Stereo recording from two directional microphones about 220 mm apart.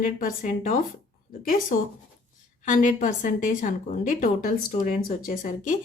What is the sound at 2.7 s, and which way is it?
A woman's voice, 35° left (ahead or behind).